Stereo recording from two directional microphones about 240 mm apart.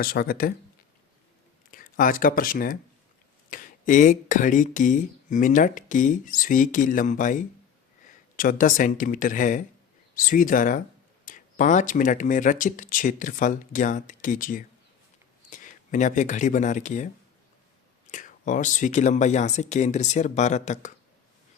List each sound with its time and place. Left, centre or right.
0.0 s speech: left
1.7 s speech: left
18.1 s speech: left